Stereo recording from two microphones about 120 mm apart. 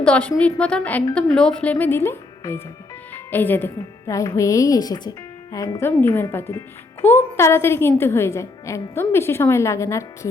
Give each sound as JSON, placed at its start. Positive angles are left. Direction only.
{"t": 0.0, "sound": "a woman's voice", "side_deg": 10}